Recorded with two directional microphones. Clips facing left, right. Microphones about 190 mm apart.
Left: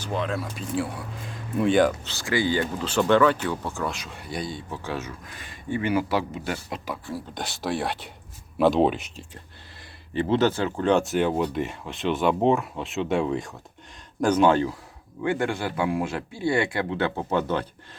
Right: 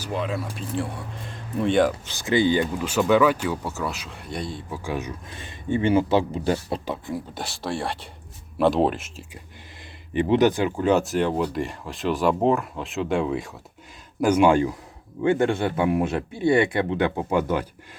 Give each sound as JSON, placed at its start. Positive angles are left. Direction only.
{"t": 0.0, "sound": "speech", "side_deg": 0}
{"t": 2.0, "sound": "speech", "side_deg": -20}
{"t": 4.7, "sound": "speech", "side_deg": -10}
{"t": 7.3, "sound": "speech", "side_deg": 0}
{"t": 10.1, "sound": "speech", "side_deg": -15}